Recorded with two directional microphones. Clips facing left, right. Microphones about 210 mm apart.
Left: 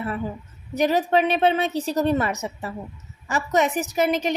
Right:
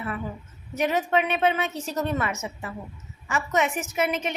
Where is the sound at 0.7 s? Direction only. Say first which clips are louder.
Left 4 dB; 35° left (ahead or behind).